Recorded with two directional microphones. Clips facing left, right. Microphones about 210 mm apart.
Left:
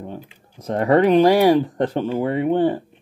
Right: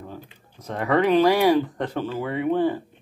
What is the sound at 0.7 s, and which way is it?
Speech, 40° left (ahead or behind).